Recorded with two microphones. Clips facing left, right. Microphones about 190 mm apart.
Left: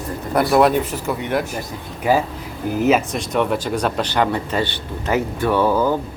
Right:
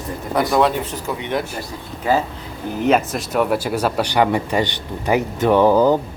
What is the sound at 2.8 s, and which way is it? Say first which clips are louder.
Speech: even; centre (ahead or behind).